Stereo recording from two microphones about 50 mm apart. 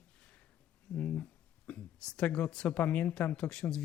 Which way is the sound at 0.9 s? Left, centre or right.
Left.